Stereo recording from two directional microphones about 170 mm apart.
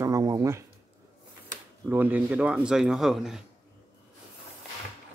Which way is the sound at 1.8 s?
10° right (ahead or behind).